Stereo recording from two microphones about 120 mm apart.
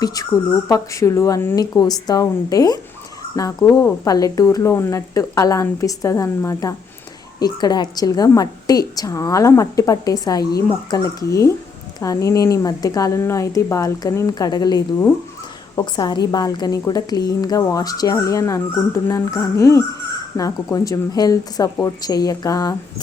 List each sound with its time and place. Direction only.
0.0 s a woman's voice: 30° left (ahead or behind)
1.5 s a woman's voice: 35° left (ahead or behind)